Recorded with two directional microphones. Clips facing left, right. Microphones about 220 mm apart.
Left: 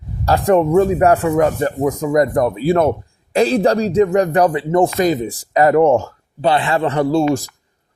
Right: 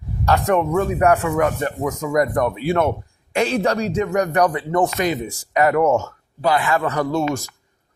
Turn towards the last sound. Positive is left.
turn(degrees=30)  # may be behind; listen again after turning